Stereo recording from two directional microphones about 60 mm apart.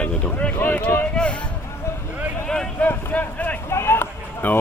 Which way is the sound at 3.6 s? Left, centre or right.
Left.